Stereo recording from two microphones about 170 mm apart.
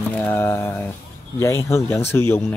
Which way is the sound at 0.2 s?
15° left (ahead or behind).